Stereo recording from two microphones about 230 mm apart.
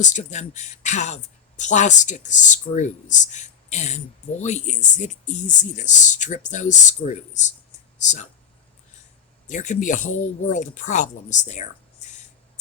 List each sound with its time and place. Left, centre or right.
0.0 s speech: left
9.5 s speech: left